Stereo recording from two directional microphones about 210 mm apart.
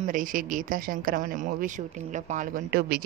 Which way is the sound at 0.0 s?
40° right (ahead or behind).